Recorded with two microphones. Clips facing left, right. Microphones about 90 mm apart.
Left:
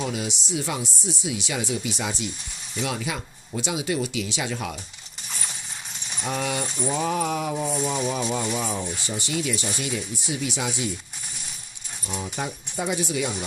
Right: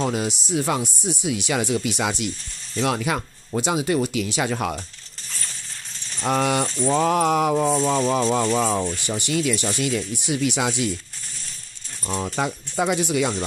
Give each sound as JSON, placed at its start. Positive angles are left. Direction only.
{"t": 0.0, "sound": "speech", "side_deg": -45}
{"t": 5.9, "sound": "a sound", "side_deg": 15}
{"t": 6.2, "sound": "speech", "side_deg": -70}
{"t": 9.0, "sound": "speech", "side_deg": -60}
{"t": 12.1, "sound": "speech", "side_deg": -85}